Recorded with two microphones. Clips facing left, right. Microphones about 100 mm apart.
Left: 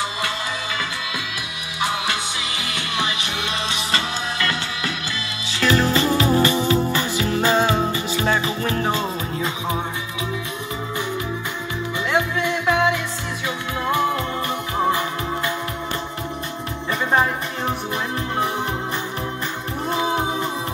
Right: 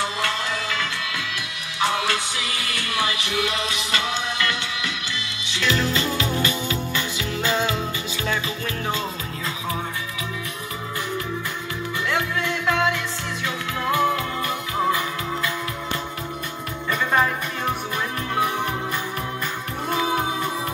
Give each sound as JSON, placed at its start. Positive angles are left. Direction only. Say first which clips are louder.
{"t": 1.8, "sound": "music", "louder": "right 1 dB", "side_deg": 15}
{"t": 12.1, "sound": "music", "louder": "left 4 dB", "side_deg": 15}
{"t": 13.8, "sound": "music", "louder": "even", "side_deg": 30}
{"t": 16.9, "sound": "music", "louder": "left 1 dB", "side_deg": 25}
{"t": 19.9, "sound": "music", "louder": "left 1 dB", "side_deg": 25}